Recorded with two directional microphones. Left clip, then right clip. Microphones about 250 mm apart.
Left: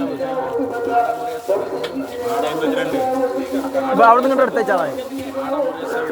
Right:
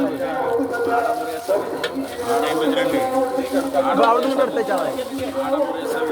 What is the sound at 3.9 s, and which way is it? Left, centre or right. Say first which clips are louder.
Speech: left 7 dB; left.